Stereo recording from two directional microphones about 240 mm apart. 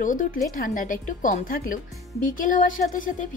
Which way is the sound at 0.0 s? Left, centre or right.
Left.